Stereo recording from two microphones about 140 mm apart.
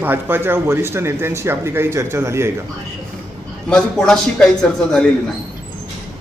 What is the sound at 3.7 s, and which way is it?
Speech, 5° left (ahead or behind).